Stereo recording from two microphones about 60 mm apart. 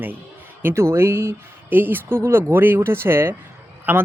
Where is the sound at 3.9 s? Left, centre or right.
Right.